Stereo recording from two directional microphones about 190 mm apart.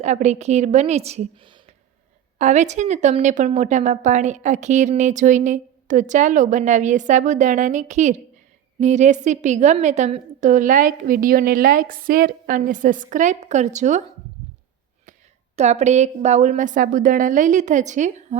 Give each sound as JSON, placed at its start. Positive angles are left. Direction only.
{"t": 0.0, "sound": "a woman's voice", "side_deg": -40}
{"t": 2.4, "sound": "a woman's voice", "side_deg": -40}
{"t": 15.5, "sound": "a woman's voice", "side_deg": -35}